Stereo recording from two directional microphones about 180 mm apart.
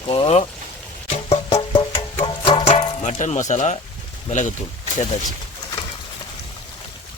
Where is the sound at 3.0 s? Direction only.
45° left (ahead or behind).